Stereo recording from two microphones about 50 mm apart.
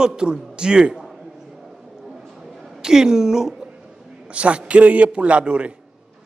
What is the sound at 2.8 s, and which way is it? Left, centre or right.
Speech, centre.